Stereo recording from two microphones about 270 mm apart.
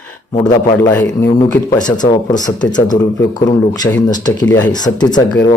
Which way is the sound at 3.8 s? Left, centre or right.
Centre.